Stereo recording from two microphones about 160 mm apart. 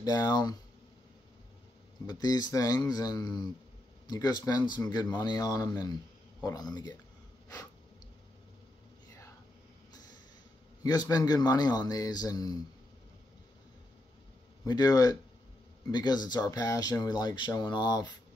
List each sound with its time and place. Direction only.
0.0 s speech: 25° left (ahead or behind)
2.0 s speech: 25° left (ahead or behind)
10.8 s speech: 25° left (ahead or behind)
14.6 s speech: 20° left (ahead or behind)